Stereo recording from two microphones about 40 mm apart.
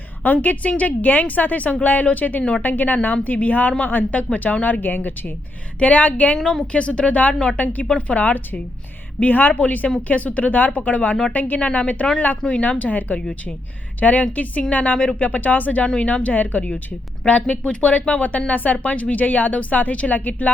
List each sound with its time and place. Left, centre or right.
0.2 s speech: left
6.3 s a woman's voice: centre
6.7 s speech: left
11.6 s speech: left
12.5 s speech: left